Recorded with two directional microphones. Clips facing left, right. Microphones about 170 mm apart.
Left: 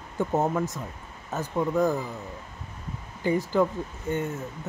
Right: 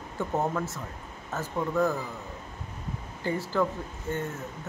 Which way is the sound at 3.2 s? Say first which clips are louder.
Left 4 dB; 15° left (ahead or behind).